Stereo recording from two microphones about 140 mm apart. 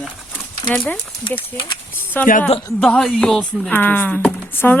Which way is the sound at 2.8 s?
5° left (ahead or behind).